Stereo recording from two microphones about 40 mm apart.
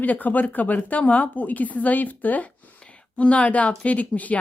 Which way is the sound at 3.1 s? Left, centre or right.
Left.